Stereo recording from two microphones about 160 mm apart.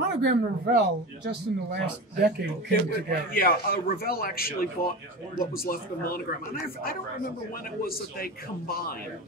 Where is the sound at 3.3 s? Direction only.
65° left (ahead or behind).